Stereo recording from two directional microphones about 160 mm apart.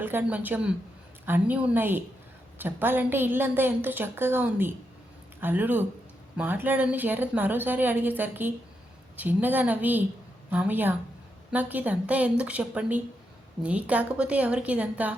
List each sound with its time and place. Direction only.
0.0 s a woman's voice: 10° right (ahead or behind)